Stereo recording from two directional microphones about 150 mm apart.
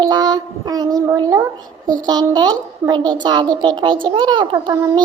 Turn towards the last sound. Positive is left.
turn(degrees=-30)  # may be behind; listen again after turning